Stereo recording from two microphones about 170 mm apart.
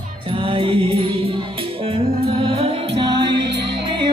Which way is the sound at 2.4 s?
35° right (ahead or behind).